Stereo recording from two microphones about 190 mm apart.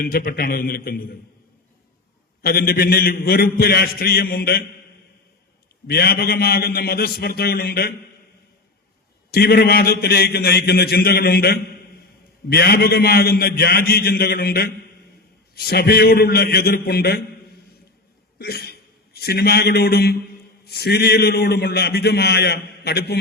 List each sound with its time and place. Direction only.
0.0 s a man's voice: 50° left (ahead or behind)
2.4 s a man's voice: 55° left (ahead or behind)
5.9 s a man's voice: 55° left (ahead or behind)
9.3 s a man's voice: 55° left (ahead or behind)